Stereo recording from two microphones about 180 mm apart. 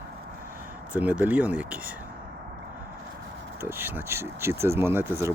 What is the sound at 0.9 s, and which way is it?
Speech, 10° right (ahead or behind).